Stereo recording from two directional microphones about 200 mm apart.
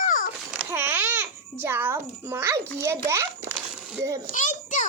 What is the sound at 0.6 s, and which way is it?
A child's voice, 10° right (ahead or behind).